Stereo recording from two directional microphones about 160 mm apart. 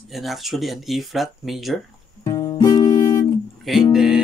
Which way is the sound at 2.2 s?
25° left (ahead or behind).